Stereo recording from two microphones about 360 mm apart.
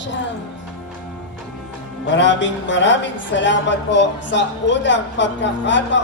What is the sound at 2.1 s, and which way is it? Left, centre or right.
A woman's voice, left.